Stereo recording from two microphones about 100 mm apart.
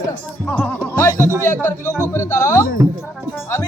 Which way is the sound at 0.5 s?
20° left (ahead or behind).